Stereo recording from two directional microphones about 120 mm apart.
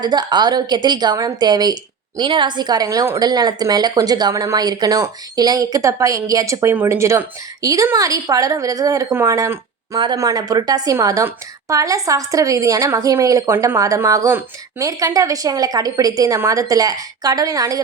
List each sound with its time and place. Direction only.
0.0 s a woman's voice: 35° right (ahead or behind)